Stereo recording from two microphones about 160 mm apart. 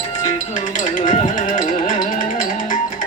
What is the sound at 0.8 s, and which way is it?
Music, 50° left (ahead or behind).